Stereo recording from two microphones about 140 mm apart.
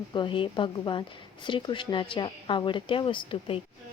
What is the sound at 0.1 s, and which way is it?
A woman's voice, 35° left (ahead or behind).